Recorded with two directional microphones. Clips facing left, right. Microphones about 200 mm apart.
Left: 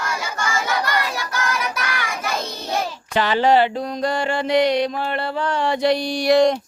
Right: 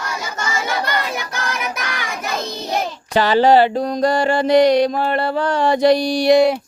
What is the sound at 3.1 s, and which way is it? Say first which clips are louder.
Mantra: right 4 dB; 35° right (ahead or behind).